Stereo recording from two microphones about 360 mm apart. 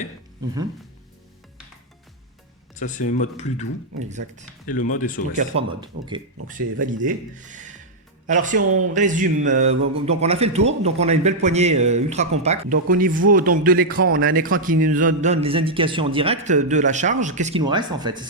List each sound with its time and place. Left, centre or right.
2.7 s speech: left
4.0 s a man's voice: centre
4.7 s speech: left
5.4 s a man's voice: centre